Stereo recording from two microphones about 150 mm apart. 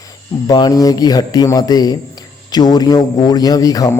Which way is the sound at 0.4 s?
25° left (ahead or behind).